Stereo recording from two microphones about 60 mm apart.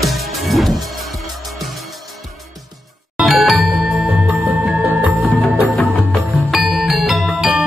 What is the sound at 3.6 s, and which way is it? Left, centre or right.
Music, right.